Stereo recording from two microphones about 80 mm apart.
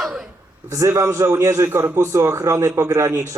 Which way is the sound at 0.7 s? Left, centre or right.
Right.